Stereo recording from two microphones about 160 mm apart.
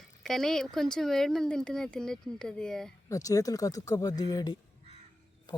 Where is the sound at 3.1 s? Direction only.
20° left (ahead or behind).